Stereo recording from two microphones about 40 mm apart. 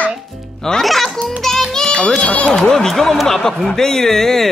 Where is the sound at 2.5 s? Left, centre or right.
Centre.